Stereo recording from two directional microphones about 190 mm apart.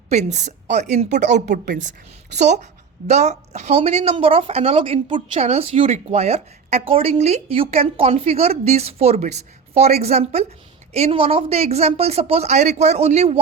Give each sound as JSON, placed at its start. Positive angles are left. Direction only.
{"t": 0.1, "sound": "a woman's voice", "side_deg": -35}